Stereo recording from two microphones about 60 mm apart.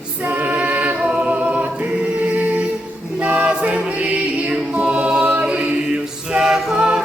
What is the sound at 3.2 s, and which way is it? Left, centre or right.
Music, centre.